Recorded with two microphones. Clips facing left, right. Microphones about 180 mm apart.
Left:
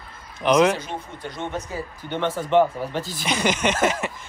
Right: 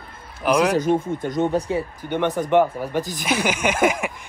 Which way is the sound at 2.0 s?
15° right (ahead or behind).